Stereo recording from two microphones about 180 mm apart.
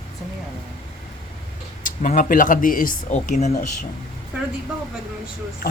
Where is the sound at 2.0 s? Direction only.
50° left (ahead or behind).